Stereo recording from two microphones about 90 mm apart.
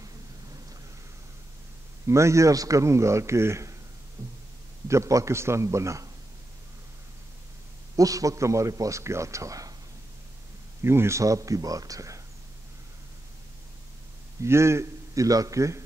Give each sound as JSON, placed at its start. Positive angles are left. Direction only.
{"t": 2.0, "sound": "a man's voice", "side_deg": -35}
{"t": 4.2, "sound": "heart sounds", "side_deg": -40}
{"t": 4.8, "sound": "a man's voice", "side_deg": -35}
{"t": 7.9, "sound": "a man's voice", "side_deg": -40}
{"t": 10.8, "sound": "a man's voice", "side_deg": -30}
{"t": 14.4, "sound": "a man's voice", "side_deg": -30}